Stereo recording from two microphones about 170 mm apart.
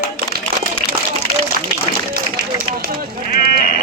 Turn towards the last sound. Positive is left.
turn(degrees=60)  # may be behind; listen again after turning